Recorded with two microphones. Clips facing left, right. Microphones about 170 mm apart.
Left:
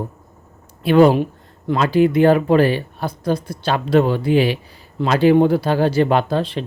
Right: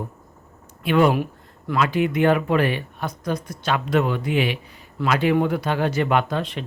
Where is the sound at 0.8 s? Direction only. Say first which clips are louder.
Left 6 dB; 35° left (ahead or behind).